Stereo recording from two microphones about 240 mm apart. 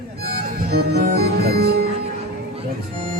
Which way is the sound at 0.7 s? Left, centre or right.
Right.